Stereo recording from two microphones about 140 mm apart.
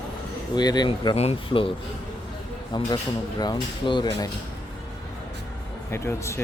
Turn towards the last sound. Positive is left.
turn(degrees=20)  # may be behind; listen again after turning